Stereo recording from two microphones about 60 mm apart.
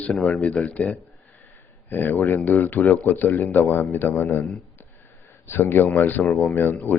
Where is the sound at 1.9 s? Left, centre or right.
Left.